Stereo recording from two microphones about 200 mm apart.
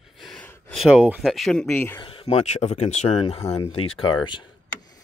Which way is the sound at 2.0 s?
30° left (ahead or behind).